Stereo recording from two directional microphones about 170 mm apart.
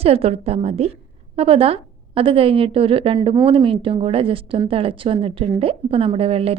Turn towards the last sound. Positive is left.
turn(degrees=-35)  # may be behind; listen again after turning